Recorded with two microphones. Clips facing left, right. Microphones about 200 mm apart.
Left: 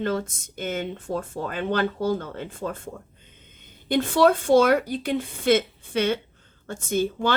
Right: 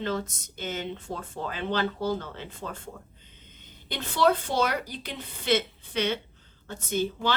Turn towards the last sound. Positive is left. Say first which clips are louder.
# left 4 dB
turn(degrees=50)  # may be behind; listen again after turning